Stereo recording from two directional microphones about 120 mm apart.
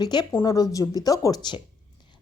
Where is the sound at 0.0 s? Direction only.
35° left (ahead or behind).